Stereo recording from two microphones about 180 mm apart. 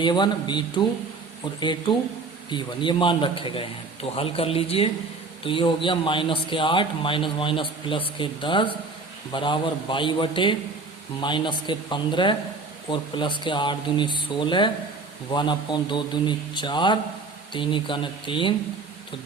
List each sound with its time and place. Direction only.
0.0 s a man's voice: 25° left (ahead or behind)